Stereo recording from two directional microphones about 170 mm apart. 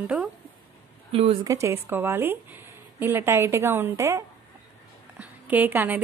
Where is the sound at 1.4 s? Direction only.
15° right (ahead or behind).